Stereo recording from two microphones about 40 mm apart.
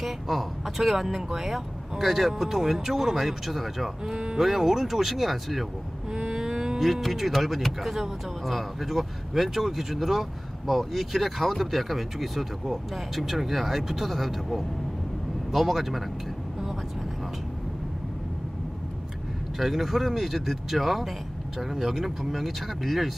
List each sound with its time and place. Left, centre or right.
0.0 s speech: centre
4.1 s speech: centre
6.1 s a sound: centre
6.8 s speech: centre
19.6 s speech: centre